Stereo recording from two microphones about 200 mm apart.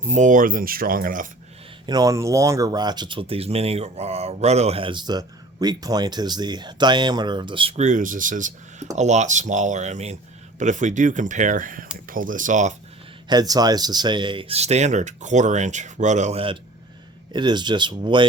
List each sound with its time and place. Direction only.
0.1 s speech: 40° right (ahead or behind)
1.9 s speech: 20° right (ahead or behind); by 12.7 s 40° right (ahead or behind)
13.2 s speech: 20° right (ahead or behind)